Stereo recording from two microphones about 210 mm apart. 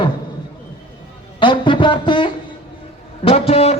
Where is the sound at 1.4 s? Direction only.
25° left (ahead or behind).